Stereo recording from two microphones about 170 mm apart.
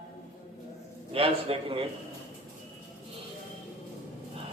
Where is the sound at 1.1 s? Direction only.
35° right (ahead or behind).